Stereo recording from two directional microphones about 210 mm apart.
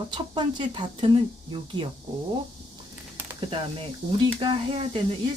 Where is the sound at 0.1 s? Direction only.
20° right (ahead or behind).